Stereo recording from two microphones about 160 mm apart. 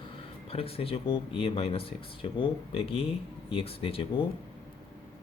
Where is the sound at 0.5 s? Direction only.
35° left (ahead or behind).